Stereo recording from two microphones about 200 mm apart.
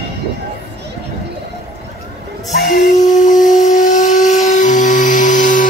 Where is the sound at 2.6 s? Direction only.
40° left (ahead or behind).